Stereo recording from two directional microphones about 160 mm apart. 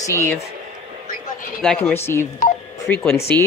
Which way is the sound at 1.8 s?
15° left (ahead or behind).